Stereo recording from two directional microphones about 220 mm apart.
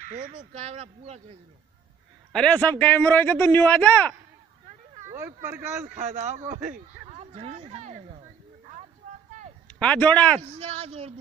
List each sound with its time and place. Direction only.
0.2 s speech: 35° right (ahead or behind)
2.3 s a man's voice: 5° left (ahead or behind)
5.1 s speech: 10° right (ahead or behind)
6.1 s speech: 35° right (ahead or behind)
7.1 s a sound: 30° right (ahead or behind)
9.8 s speech: 5° left (ahead or behind)
10.4 s speech: 25° right (ahead or behind)